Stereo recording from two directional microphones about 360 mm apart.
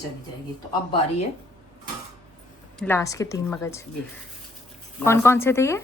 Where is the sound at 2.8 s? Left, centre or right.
Centre.